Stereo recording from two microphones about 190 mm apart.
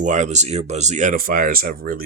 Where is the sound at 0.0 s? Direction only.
40° right (ahead or behind).